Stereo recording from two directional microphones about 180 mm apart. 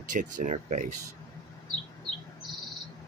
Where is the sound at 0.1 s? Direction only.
45° right (ahead or behind).